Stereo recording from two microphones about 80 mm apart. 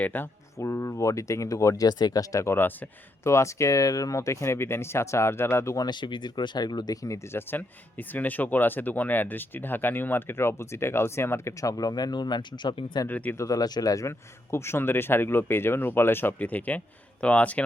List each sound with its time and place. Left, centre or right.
0.0 s speech: left
0.6 s speech: left
1.9 s speech: left
5.7 s speech: left
7.3 s speech: left
11.6 s speech: left
13.1 s speech: left
13.4 s speech: left
14.5 s speech: left